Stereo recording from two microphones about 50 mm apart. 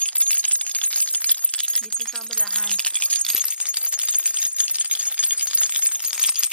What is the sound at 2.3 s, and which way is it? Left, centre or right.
Speech, centre.